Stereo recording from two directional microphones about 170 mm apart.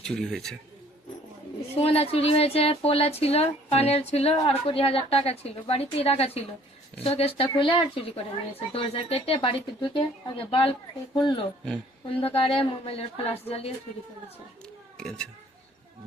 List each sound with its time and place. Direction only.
0.0 s a man's voice: 5° left (ahead or behind)
1.8 s speech: 35° left (ahead or behind)
14.9 s speech: 5° left (ahead or behind)